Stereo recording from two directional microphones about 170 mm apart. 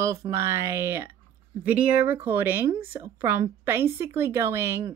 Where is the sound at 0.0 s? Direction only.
15° right (ahead or behind).